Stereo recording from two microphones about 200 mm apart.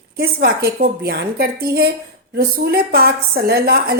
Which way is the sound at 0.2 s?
50° right (ahead or behind).